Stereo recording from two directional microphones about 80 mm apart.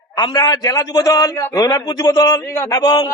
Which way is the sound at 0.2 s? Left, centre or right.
Left.